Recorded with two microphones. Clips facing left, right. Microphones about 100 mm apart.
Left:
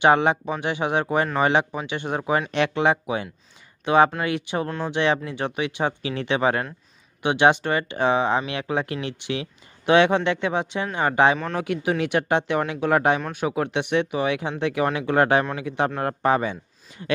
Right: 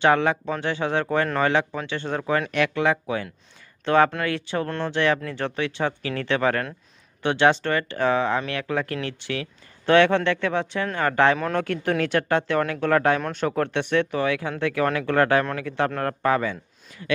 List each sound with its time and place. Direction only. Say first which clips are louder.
0.0 s speech: left 2 dB; 20° left (ahead or behind)
4.6 s speech: even; 5° left (ahead or behind)
4.9 s speech: left 1 dB; 20° left (ahead or behind)
11.3 s speech: right 2 dB; centre (ahead or behind)
11.6 s speech: even; 10° left (ahead or behind)